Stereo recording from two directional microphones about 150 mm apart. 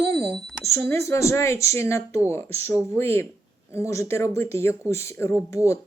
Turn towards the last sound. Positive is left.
turn(degrees=20)  # may be behind; listen again after turning